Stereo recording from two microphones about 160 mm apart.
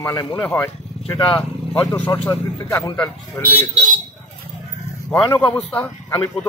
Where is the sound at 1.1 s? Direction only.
25° left (ahead or behind).